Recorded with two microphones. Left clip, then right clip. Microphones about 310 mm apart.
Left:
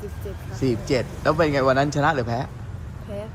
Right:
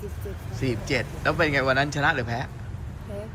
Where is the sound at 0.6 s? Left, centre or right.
Centre.